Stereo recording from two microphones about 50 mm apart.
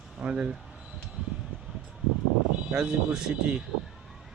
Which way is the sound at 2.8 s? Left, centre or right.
Centre.